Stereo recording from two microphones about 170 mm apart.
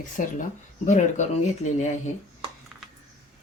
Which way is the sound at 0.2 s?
50° left (ahead or behind).